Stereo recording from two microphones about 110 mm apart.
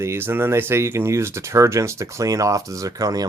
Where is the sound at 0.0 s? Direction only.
20° right (ahead or behind).